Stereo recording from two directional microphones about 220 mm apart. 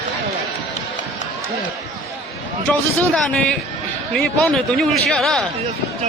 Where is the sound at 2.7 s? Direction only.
Centre (ahead or behind).